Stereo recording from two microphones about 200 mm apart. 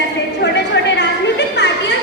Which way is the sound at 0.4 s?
60° left (ahead or behind).